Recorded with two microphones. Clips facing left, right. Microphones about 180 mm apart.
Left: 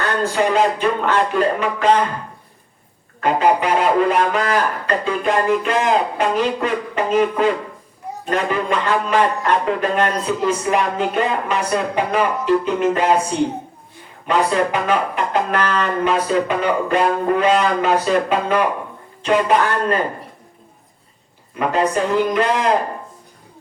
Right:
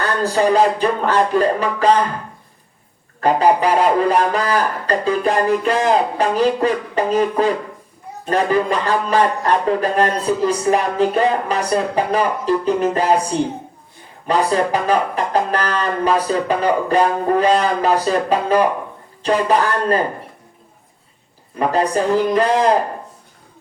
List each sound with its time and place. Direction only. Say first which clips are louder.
0.2 s speech: right 3 dB; 35° right (ahead or behind)
3.2 s speech: right 2 dB; 35° right (ahead or behind)
14.3 s speech: right 1 dB; 35° right (ahead or behind)
21.5 s speech: right 1 dB; 35° right (ahead or behind)